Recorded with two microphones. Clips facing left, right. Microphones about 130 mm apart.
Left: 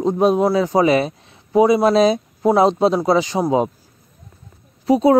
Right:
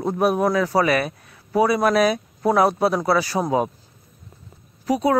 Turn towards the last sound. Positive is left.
turn(degrees=30)  # may be behind; listen again after turning